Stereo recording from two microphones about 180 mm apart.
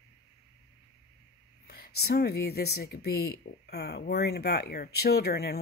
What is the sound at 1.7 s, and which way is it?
Speech, 60° left (ahead or behind).